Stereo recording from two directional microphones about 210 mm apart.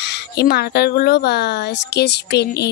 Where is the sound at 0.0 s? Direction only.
50° left (ahead or behind).